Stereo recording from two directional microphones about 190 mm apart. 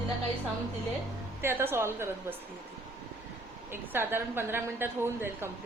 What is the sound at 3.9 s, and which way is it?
Speech, 10° right (ahead or behind).